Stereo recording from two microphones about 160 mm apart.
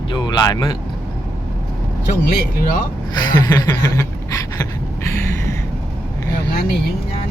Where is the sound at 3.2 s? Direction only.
25° left (ahead or behind).